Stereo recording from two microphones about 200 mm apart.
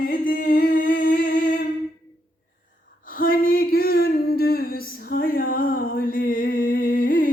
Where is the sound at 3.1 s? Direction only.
45° left (ahead or behind).